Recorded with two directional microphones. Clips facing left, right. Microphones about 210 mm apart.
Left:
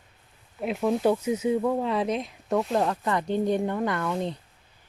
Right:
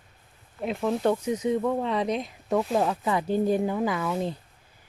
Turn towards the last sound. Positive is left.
turn(degrees=-5)  # may be behind; listen again after turning